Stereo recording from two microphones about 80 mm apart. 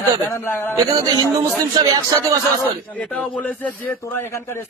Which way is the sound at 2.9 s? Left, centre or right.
Centre.